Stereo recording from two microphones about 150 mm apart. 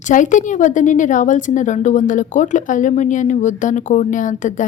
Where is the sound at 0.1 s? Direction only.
55° left (ahead or behind).